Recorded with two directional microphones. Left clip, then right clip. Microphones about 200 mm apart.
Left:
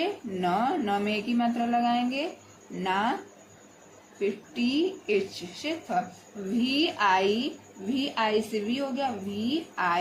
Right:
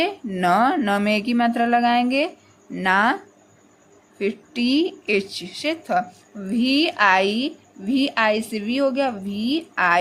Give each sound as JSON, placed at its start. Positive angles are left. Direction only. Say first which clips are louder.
{"t": 0.0, "sound": "speech", "louder": "right 7 dB", "side_deg": -45}
{"t": 4.2, "sound": "speech", "louder": "right 5 dB", "side_deg": -45}